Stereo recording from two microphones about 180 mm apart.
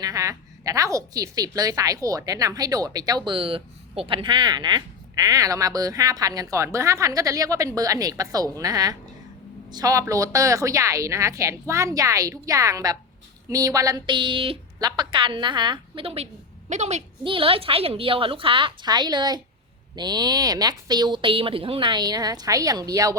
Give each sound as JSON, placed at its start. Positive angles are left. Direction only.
{"t": 0.0, "sound": "a woman's voice", "side_deg": -20}